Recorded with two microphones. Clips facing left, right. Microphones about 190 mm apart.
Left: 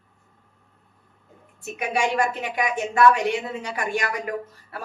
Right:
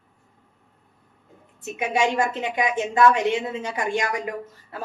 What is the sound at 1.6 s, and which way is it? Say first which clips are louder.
A woman's voice: right 2 dB; 20° right (ahead or behind).